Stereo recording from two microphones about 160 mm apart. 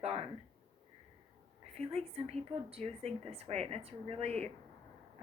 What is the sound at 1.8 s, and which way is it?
Speech, 40° right (ahead or behind).